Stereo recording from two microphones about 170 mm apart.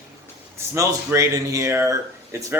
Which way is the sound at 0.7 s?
20° right (ahead or behind).